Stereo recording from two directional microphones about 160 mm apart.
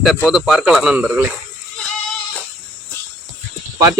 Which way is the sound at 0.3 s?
Centre (ahead or behind).